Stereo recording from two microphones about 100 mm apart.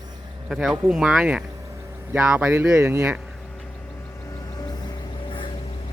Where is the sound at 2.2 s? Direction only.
10° right (ahead or behind).